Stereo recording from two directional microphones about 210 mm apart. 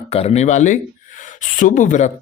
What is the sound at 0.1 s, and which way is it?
Speech, 30° left (ahead or behind).